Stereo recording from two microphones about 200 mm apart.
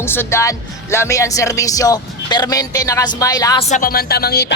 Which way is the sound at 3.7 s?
45° left (ahead or behind).